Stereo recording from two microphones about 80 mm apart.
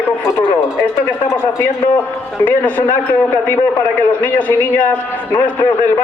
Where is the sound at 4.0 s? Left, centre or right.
Left.